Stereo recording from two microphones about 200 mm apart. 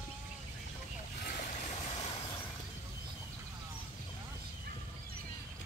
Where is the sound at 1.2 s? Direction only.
35° left (ahead or behind).